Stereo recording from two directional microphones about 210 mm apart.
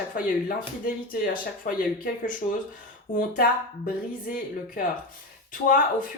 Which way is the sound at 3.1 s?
40° left (ahead or behind).